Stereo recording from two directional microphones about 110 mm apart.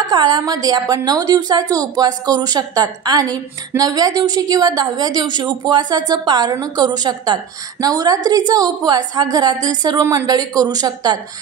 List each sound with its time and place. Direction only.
0.1 s a woman's voice: 40° right (ahead or behind)